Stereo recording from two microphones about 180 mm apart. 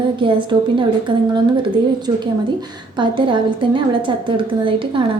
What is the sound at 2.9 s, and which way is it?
Speech, 25° right (ahead or behind).